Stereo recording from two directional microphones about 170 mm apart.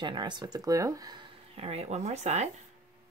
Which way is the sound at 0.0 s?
25° right (ahead or behind).